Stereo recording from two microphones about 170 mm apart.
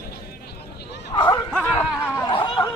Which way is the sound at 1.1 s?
25° left (ahead or behind).